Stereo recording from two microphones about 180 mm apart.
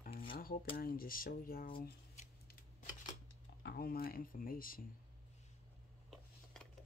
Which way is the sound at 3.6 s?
55° left (ahead or behind).